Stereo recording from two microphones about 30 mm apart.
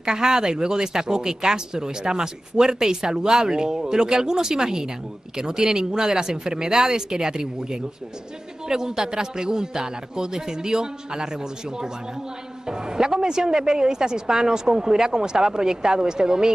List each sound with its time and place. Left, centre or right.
0.0 s speech: right
12.6 s speech: right